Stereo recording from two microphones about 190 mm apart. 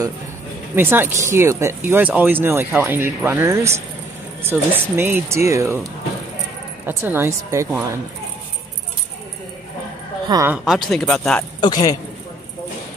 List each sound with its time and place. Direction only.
0.7 s speech: 10° right (ahead or behind)
6.9 s speech: 15° right (ahead or behind)
10.2 s speech: 20° right (ahead or behind)
10.5 s speech: centre (ahead or behind)
11.6 s a man's voice: 20° left (ahead or behind)